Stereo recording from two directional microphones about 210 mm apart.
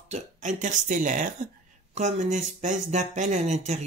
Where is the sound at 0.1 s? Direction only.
35° right (ahead or behind).